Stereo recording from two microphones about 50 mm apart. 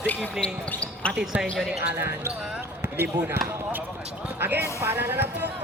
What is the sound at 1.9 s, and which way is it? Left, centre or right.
Speech, right.